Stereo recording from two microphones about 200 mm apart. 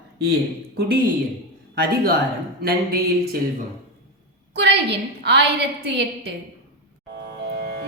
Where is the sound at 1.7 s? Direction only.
50° right (ahead or behind).